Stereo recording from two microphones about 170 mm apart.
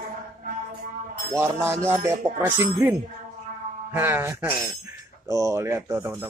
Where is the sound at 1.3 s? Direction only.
15° right (ahead or behind).